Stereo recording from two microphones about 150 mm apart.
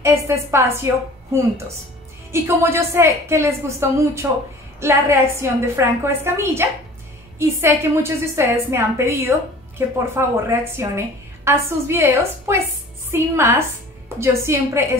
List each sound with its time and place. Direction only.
0.0 s a woman's voice: 15° right (ahead or behind)
2.3 s a woman's voice: 15° right (ahead or behind)